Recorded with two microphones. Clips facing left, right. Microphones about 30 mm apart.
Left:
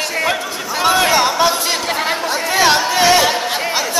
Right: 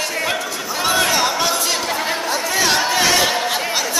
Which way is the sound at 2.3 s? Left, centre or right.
Left.